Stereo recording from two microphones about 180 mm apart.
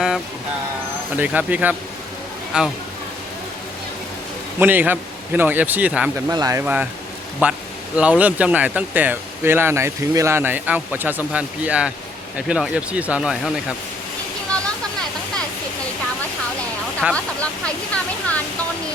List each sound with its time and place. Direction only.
1.1 s speech: 10° right (ahead or behind)
4.6 s speech: 10° right (ahead or behind)
17.0 s speech: 5° right (ahead or behind)
17.9 s speech: 5° left (ahead or behind)